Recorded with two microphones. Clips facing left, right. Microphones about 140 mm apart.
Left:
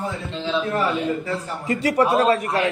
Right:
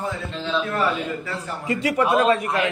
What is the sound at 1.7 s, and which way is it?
A man's voice, 40° left (ahead or behind).